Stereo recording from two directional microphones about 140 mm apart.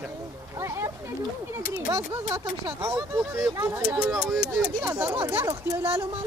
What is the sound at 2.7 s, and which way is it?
Speech, 20° right (ahead or behind).